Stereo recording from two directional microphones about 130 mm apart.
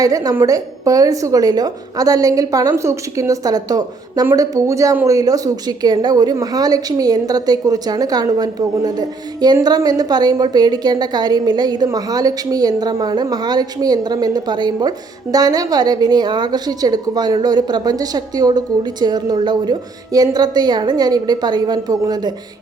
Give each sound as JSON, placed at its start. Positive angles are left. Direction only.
{"t": 0.0, "sound": "a woman's voice", "side_deg": -30}